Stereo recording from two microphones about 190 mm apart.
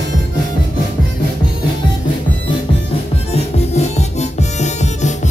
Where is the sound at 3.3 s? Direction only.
35° left (ahead or behind).